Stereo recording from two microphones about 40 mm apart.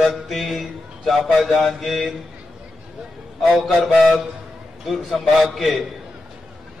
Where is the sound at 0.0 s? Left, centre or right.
Centre.